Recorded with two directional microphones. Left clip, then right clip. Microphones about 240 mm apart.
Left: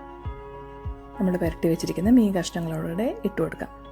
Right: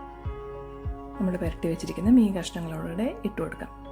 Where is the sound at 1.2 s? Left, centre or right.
Centre.